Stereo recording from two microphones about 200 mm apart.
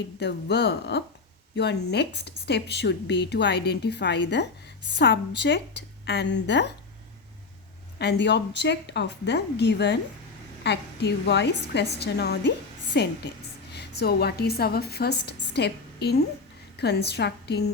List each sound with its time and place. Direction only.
0.2 s a woman's voice: 55° left (ahead or behind)
7.9 s a woman's voice: 60° left (ahead or behind)